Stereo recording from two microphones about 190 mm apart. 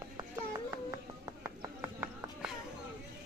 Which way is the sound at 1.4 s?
10° right (ahead or behind).